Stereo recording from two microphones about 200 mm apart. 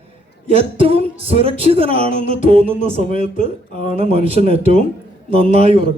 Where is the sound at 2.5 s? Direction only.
30° right (ahead or behind).